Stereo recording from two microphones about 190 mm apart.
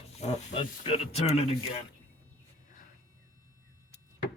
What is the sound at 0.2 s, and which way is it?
Speech, 35° left (ahead or behind).